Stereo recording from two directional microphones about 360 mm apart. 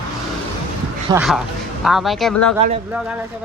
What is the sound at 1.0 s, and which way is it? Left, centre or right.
Speech, centre.